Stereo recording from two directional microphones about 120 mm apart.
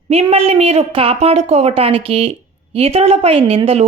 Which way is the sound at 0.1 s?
60° right (ahead or behind).